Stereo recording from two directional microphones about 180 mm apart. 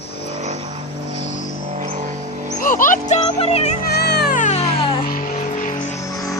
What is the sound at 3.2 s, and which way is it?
Speech, 30° left (ahead or behind).